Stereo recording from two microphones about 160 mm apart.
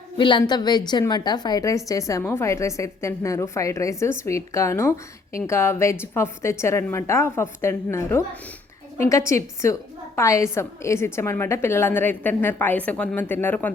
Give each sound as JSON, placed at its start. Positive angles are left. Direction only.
{"t": 0.2, "sound": "a woman's voice", "side_deg": 30}